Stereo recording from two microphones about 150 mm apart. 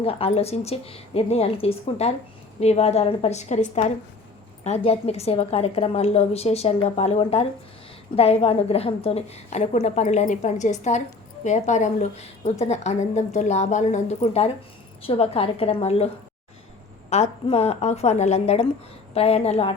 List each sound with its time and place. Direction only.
0.0 s a woman's voice: 40° left (ahead or behind)
17.1 s a woman's voice: 45° left (ahead or behind)